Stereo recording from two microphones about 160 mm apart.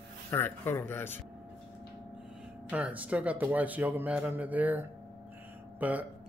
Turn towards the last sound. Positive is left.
turn(degrees=-10)  # may be behind; listen again after turning